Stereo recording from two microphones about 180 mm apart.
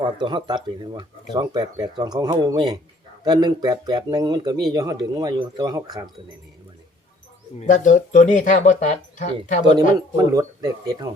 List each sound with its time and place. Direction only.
0.0 s speech: 25° right (ahead or behind)
7.6 s speech: 40° left (ahead or behind)
10.2 s speech: 20° right (ahead or behind)